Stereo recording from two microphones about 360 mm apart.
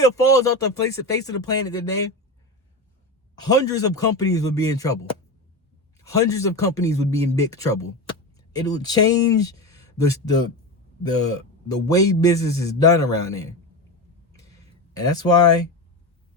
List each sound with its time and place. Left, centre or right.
0.0 s a man's voice: centre
3.3 s a man's voice: centre
6.0 s a man's voice: centre
14.3 s a sound: centre